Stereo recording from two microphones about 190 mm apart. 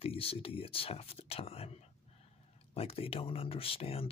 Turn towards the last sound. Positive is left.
turn(degrees=30)  # may be behind; listen again after turning